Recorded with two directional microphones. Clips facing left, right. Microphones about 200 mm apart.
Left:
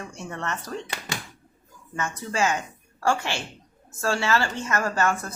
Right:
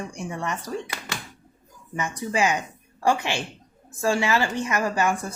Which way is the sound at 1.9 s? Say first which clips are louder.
Right 2 dB; 15° right (ahead or behind).